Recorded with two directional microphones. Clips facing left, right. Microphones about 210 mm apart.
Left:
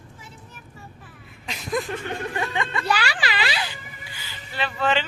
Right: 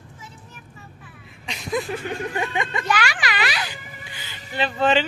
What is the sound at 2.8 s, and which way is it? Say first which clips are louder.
Speech: even; 35° left (ahead or behind).